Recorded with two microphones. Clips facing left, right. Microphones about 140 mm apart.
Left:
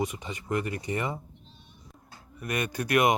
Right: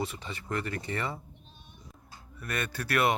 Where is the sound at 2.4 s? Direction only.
15° left (ahead or behind).